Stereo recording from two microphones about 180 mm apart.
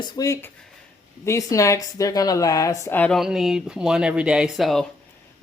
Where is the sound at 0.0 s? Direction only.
20° left (ahead or behind); by 4.9 s centre (ahead or behind).